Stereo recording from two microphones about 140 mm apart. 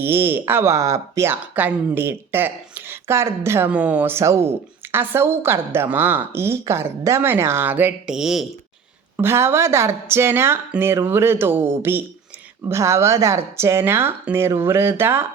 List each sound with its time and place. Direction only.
0.0 s speech: 15° right (ahead or behind)
9.1 s speech: 20° right (ahead or behind)